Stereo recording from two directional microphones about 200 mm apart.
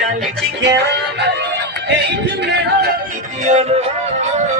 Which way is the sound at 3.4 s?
35° right (ahead or behind).